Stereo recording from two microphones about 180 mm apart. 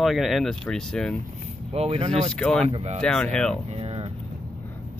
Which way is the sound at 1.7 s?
35° right (ahead or behind).